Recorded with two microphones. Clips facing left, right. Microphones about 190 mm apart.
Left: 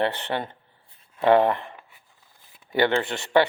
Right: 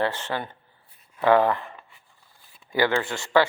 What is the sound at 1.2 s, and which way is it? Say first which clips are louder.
Speech: left 1 dB; 25° left (ahead or behind).